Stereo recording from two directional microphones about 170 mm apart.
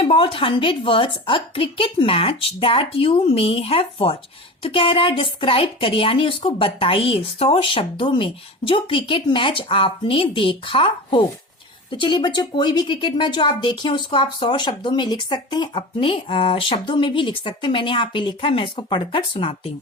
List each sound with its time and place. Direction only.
0.0 s a woman's voice: 30° left (ahead or behind)